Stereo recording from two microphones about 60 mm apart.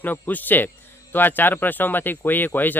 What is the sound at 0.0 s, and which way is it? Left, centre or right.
Speech, left.